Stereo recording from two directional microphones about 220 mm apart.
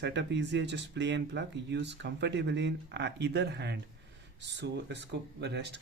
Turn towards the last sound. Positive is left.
turn(degrees=-50)  # may be behind; listen again after turning